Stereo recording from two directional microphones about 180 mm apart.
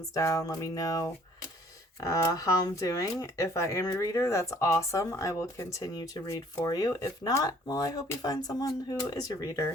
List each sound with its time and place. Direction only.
0.1 s speech: 15° left (ahead or behind)